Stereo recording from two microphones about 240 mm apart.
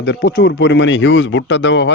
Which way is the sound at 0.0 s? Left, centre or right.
Left.